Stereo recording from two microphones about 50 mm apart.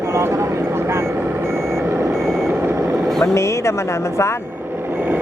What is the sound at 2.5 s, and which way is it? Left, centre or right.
Vehicle, right.